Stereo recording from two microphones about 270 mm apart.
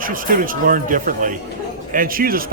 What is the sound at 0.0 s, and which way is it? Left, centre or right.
Speech, right.